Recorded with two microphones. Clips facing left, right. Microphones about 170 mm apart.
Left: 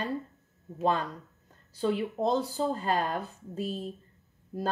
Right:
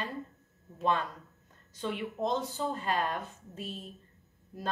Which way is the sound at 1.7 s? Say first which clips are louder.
Left 6 dB; 35° left (ahead or behind).